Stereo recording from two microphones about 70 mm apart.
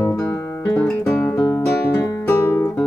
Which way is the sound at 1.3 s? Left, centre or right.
Left.